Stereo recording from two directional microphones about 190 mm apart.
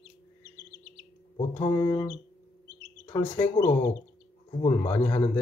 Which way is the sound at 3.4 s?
15° left (ahead or behind).